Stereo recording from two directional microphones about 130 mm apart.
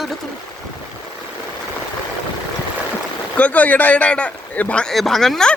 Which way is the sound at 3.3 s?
10° left (ahead or behind).